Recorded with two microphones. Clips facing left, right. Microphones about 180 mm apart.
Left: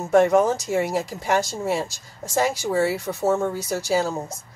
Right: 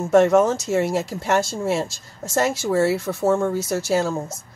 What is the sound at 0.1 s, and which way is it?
Speech, 15° left (ahead or behind).